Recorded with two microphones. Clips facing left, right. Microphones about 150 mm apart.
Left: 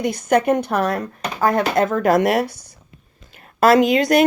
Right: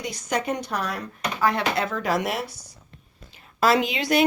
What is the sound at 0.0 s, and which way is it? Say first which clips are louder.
Speech: left 10 dB; 55° left (ahead or behind).